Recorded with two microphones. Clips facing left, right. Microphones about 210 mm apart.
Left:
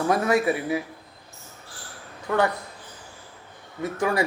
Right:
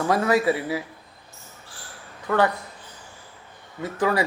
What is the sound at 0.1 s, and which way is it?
Speech, 25° left (ahead or behind).